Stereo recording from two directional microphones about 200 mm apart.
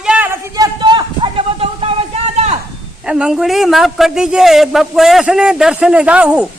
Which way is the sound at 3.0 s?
5° right (ahead or behind).